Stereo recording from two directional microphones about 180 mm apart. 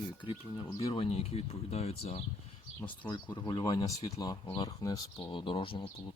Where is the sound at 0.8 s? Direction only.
30° left (ahead or behind).